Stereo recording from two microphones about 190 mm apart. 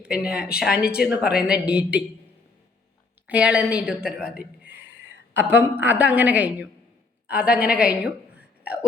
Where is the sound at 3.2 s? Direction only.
5° right (ahead or behind).